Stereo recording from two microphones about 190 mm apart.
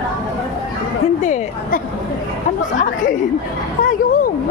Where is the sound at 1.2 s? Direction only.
40° left (ahead or behind).